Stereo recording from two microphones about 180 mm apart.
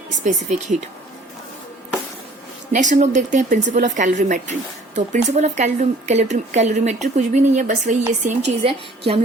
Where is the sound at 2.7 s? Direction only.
45° right (ahead or behind).